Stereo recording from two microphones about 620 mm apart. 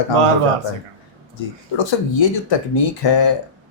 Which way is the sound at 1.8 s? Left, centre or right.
Left.